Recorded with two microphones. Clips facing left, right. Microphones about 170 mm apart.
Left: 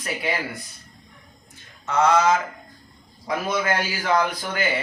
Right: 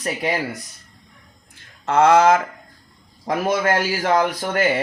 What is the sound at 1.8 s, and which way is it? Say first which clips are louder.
A man's voice: right 5 dB; 55° right (ahead or behind).